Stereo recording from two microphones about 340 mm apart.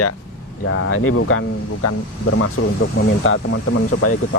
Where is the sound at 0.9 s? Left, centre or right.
Left.